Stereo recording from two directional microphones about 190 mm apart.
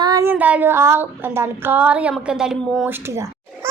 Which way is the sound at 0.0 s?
20° right (ahead or behind).